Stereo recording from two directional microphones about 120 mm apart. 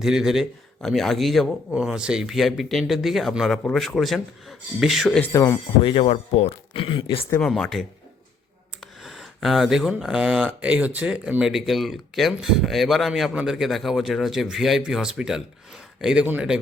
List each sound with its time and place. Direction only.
0.0 s speech: 5° right (ahead or behind)
5.2 s speech: 25° left (ahead or behind)
5.8 s speech: 50° left (ahead or behind)
7.3 s speech: 5° left (ahead or behind)
8.8 s a sound: centre (ahead or behind)
10.0 s speech: 5° right (ahead or behind)